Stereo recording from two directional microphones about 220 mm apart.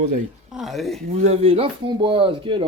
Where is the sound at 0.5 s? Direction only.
Centre (ahead or behind).